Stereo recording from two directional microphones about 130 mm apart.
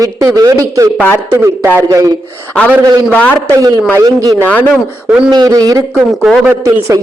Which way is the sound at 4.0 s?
30° right (ahead or behind).